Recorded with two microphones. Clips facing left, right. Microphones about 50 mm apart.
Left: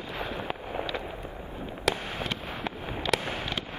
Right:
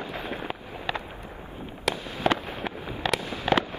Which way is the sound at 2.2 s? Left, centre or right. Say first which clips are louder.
Right 15 dB; right.